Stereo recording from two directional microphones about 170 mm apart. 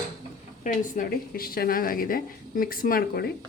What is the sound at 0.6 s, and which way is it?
Speech, 50° left (ahead or behind).